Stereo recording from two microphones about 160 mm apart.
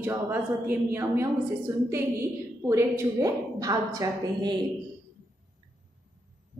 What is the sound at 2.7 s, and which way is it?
A woman's voice, 20° right (ahead or behind).